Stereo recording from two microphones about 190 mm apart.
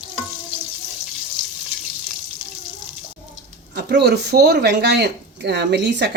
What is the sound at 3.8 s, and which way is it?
Speech, 60° right (ahead or behind).